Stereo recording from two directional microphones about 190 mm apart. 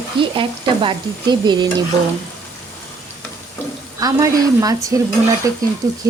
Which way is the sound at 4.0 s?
20° right (ahead or behind).